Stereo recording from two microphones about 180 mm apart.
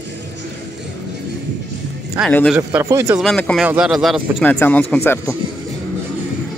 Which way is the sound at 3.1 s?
Centre (ahead or behind).